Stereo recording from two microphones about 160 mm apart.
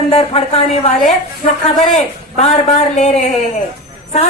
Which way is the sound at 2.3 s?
45° left (ahead or behind).